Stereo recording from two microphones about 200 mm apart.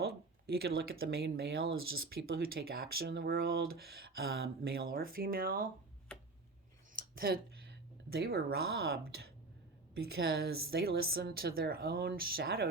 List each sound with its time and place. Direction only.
0.0 s a sound: 50° right (ahead or behind)
0.8 s speech: 50° right (ahead or behind)
6.9 s speech: 50° right (ahead or behind)